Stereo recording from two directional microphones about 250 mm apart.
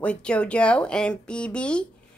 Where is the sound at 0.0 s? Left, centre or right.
Centre.